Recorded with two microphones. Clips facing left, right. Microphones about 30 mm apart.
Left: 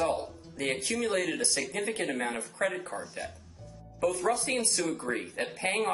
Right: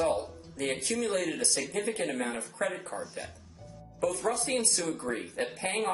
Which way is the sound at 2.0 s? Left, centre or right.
Left.